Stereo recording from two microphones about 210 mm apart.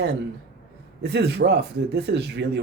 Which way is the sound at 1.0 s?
50° right (ahead or behind).